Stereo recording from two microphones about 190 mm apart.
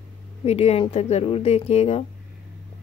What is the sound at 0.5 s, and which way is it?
A woman's voice, 30° left (ahead or behind).